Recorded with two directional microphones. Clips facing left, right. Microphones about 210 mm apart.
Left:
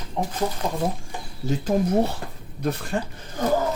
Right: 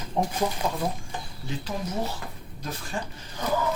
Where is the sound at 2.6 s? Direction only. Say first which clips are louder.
Left 10 dB; 65° left (ahead or behind).